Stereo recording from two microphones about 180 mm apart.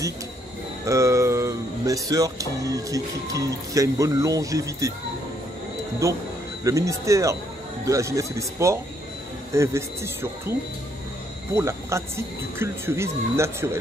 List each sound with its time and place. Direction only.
0.8 s speech: 15° right (ahead or behind)
6.0 s speech: 15° right (ahead or behind)
11.5 s speech: 15° right (ahead or behind)